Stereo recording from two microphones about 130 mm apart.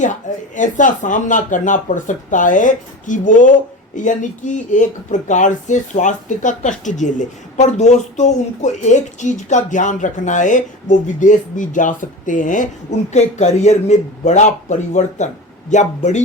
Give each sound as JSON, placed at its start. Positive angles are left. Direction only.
{"t": 0.0, "sound": "speech", "side_deg": 75}
{"t": 13.1, "sound": "speech", "side_deg": 60}